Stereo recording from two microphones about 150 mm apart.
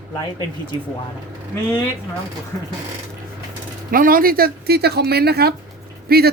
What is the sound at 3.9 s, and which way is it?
Speech, 70° right (ahead or behind).